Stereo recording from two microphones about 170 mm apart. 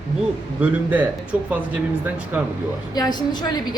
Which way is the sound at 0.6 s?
10° right (ahead or behind).